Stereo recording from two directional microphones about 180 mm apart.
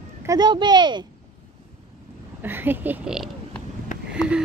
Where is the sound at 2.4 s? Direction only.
10° right (ahead or behind).